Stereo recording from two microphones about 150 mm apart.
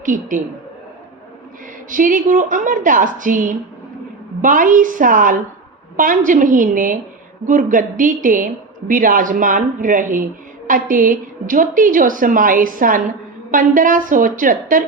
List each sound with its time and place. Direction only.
0.0 s a woman's voice: 60° right (ahead or behind)
1.9 s a woman's voice: 65° right (ahead or behind)